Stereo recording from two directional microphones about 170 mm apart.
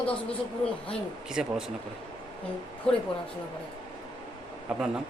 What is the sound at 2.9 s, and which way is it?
Speech, 5° left (ahead or behind).